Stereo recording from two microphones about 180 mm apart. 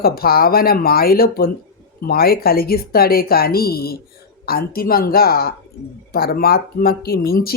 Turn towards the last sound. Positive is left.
turn(degrees=55)  # may be behind; listen again after turning